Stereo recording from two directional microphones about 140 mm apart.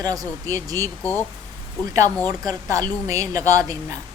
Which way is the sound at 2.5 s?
25° right (ahead or behind).